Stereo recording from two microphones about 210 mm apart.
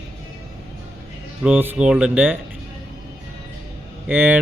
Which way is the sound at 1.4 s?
10° right (ahead or behind).